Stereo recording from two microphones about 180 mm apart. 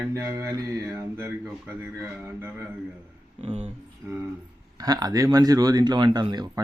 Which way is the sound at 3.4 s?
35° right (ahead or behind).